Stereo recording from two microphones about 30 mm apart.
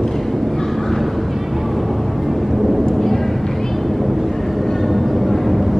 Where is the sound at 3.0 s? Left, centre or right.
Centre.